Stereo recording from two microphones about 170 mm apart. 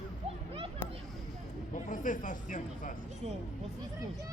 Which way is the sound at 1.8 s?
50° left (ahead or behind).